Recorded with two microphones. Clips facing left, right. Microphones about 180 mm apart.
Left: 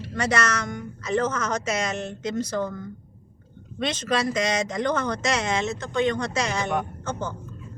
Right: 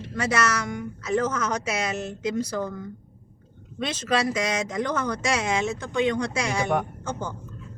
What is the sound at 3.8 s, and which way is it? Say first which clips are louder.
Speech: even; 5° right (ahead or behind).